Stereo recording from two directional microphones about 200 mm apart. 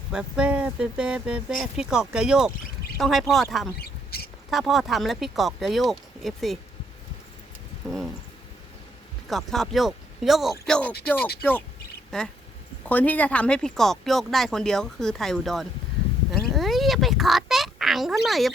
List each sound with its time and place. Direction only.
0.1 s speech: 5° right (ahead or behind)
3.8 s a sound: 50° left (ahead or behind)
4.5 s speech: centre (ahead or behind)
9.3 s speech: centre (ahead or behind)
12.1 s speech: 5° left (ahead or behind)
16.3 s a sound: centre (ahead or behind)